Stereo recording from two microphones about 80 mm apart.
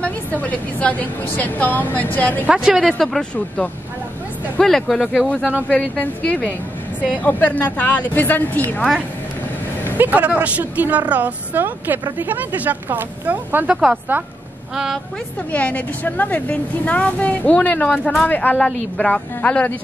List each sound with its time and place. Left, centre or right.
0.0 s a woman's voice: centre
2.4 s speech: centre
2.9 s a woman's voice: centre
4.6 s speech: centre
5.7 s a woman's voice: centre
9.9 s a woman's voice: centre
15.5 s a woman's voice: centre
18.7 s a woman's voice: centre